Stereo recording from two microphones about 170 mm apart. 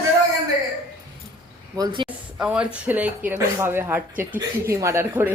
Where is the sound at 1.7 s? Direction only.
25° right (ahead or behind).